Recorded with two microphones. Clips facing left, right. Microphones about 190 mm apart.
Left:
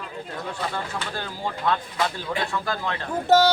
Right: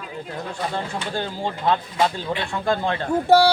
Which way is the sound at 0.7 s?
25° right (ahead or behind).